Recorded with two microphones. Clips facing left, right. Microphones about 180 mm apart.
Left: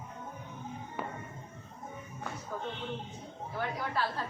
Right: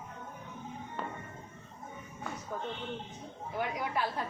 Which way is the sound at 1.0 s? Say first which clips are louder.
Left 1 dB; 10° left (ahead or behind).